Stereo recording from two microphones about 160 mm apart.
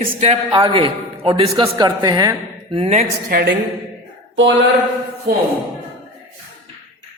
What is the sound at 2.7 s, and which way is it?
Speech, 40° right (ahead or behind).